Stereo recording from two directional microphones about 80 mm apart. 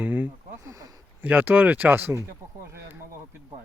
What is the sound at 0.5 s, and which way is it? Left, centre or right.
Speech, right.